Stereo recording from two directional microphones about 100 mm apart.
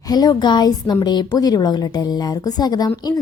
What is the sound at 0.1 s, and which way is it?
Speech, 40° left (ahead or behind).